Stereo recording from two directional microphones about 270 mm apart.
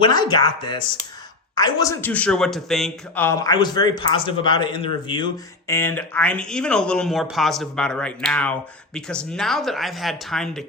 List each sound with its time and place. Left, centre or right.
0.0 s a man's voice: centre